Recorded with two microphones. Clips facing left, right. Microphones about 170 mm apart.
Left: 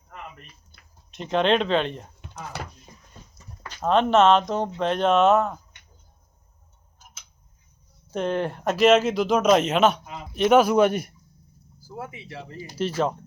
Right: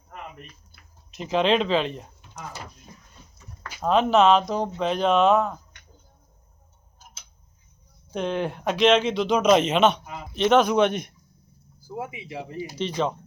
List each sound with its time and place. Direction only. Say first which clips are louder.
0.7 s speech: right 1 dB; centre (ahead or behind)
3.7 s speech: even; 5° right (ahead or behind)
8.1 s speech: left 1 dB; centre (ahead or behind)
11.9 s speech: right 3 dB; 15° right (ahead or behind)
12.8 s speech: left 3 dB; 5° left (ahead or behind)